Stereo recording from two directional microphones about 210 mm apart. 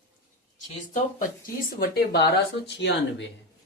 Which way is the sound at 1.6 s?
45° left (ahead or behind).